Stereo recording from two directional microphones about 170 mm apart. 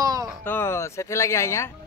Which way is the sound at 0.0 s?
20° right (ahead or behind).